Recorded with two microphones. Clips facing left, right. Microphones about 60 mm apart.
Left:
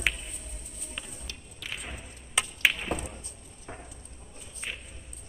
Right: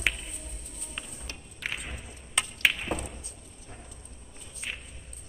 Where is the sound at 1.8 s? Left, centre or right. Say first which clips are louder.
Even; centre.